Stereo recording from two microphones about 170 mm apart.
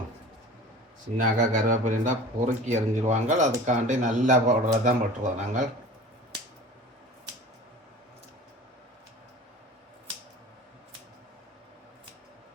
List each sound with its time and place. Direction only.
1.2 s speech: 50° right (ahead or behind)